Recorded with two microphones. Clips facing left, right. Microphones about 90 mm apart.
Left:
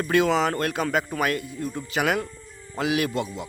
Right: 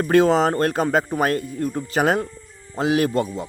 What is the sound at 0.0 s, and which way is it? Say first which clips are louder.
A man's voice: right 5 dB; 40° right (ahead or behind).